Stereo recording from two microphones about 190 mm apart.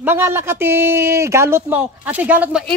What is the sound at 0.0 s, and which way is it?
Speech, 10° right (ahead or behind).